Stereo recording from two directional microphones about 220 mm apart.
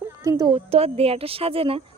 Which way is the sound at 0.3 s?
20° right (ahead or behind).